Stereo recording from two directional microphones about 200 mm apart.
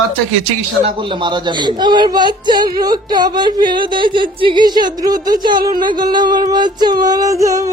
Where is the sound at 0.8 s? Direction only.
25° right (ahead or behind).